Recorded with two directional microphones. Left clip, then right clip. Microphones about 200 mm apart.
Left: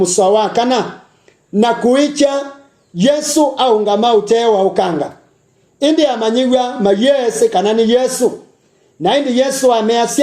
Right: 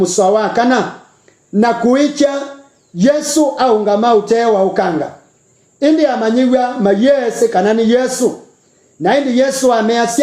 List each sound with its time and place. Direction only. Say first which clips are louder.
0.0 s a man's voice: even; 30° left (ahead or behind)